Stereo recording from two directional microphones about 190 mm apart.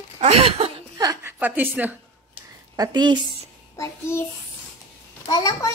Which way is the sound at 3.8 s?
15° left (ahead or behind).